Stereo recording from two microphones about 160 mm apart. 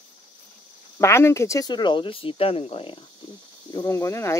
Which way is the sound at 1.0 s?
15° left (ahead or behind).